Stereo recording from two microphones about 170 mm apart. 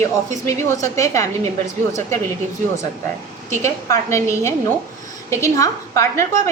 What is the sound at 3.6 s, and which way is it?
A woman's voice, 15° left (ahead or behind).